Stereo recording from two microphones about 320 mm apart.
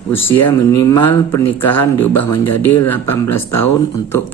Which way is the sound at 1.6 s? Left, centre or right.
Left.